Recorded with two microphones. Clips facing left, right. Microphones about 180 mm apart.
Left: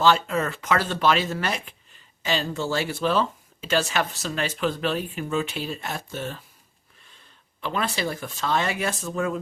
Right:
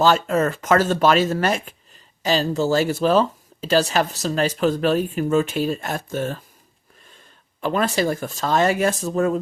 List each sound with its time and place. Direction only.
0.0 s speech: 45° right (ahead or behind)
7.6 s speech: 45° right (ahead or behind)